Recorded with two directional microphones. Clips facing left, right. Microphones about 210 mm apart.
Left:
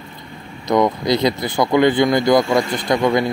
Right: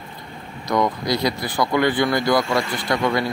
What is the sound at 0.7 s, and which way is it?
Speech, 20° left (ahead or behind).